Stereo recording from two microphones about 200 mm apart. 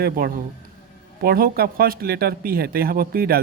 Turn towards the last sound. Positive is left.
turn(degrees=-50)  # may be behind; listen again after turning